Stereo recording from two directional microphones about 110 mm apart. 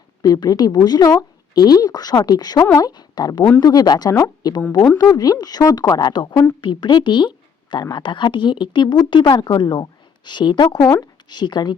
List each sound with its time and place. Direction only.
0.2 s a woman's voice: 35° left (ahead or behind)